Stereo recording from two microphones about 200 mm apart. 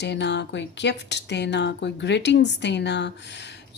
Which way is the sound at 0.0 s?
60° left (ahead or behind).